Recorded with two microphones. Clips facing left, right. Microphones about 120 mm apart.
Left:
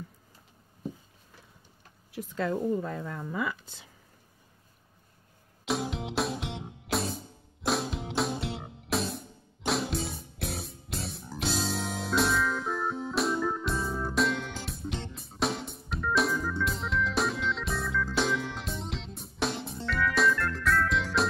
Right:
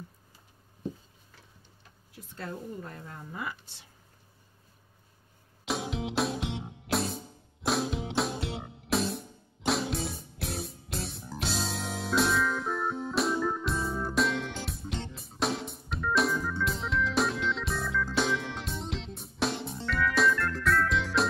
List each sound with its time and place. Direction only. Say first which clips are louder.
2.1 s a woman's voice: left 9 dB; 90° left
5.7 s music: left 1 dB; centre (ahead or behind)